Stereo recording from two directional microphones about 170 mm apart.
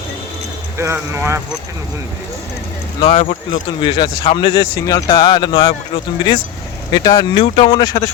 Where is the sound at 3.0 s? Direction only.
40° left (ahead or behind).